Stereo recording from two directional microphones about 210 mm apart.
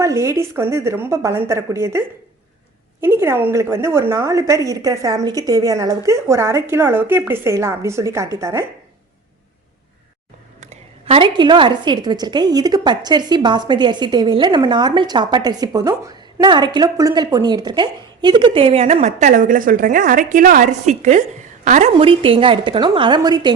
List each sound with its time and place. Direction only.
0.0 s a woman's voice: 15° right (ahead or behind)
10.6 s a woman's voice: 30° right (ahead or behind)